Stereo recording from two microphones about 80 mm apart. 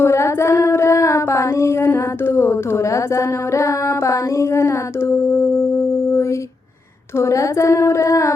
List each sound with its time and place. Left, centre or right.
0.0 s female singing: left
7.2 s speech: left